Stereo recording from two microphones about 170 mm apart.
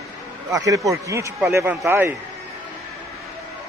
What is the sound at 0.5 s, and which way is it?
Speech, 20° right (ahead or behind).